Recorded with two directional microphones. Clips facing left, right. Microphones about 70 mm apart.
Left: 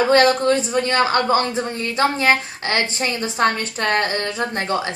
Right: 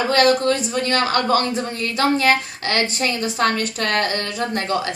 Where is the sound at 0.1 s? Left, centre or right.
Left.